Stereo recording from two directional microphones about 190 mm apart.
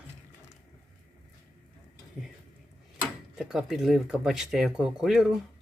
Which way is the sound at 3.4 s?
Centre (ahead or behind).